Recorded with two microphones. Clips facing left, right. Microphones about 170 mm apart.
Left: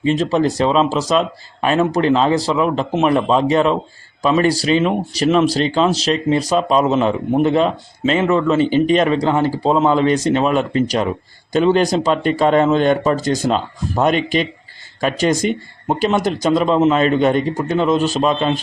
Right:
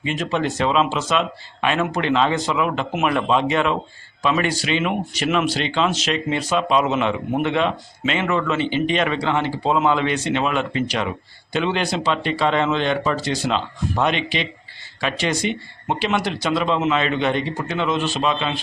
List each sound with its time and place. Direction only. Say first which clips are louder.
0.0 s speech: left 7 dB; 35° left (ahead or behind)